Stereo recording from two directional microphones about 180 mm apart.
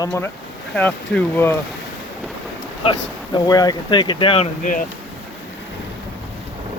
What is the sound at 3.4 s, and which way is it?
Speech, 20° left (ahead or behind).